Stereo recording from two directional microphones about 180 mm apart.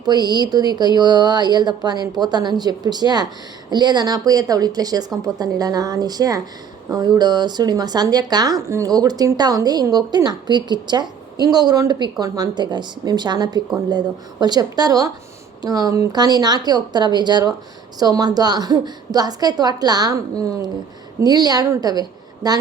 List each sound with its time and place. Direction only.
0.0 s speech: 25° right (ahead or behind)